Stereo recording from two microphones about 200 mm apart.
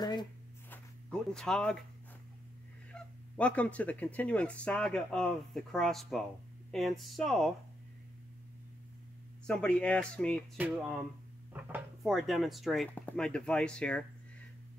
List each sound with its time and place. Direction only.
0.0 s a sound: 20° left (ahead or behind)
1.3 s speech: 5° left (ahead or behind)
2.9 s speech: 5° left (ahead or behind)
9.5 s speech: 5° left (ahead or behind)